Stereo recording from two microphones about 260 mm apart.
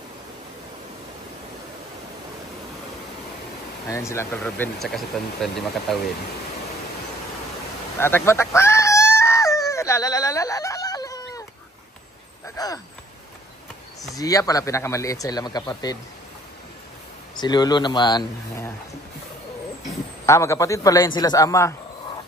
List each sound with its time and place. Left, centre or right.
3.9 s speech: centre
8.0 s a sound: centre
12.5 s speech: centre
14.1 s speech: centre
17.4 s speech: centre
20.2 s speech: centre